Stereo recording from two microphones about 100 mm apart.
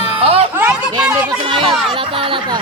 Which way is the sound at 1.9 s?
60° right (ahead or behind).